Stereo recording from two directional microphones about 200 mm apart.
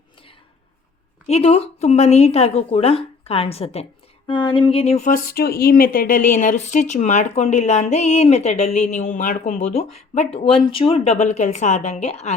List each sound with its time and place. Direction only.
1.3 s speech: 30° left (ahead or behind)